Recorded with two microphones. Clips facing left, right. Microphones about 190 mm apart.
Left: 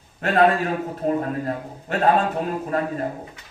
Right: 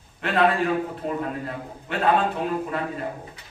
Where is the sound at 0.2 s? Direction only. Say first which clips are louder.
Left 3 dB; 45° left (ahead or behind).